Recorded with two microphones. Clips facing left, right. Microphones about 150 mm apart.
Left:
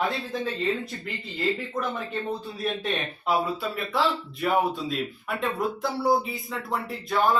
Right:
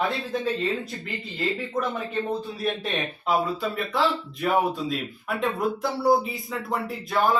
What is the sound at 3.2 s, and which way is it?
Speech, centre (ahead or behind).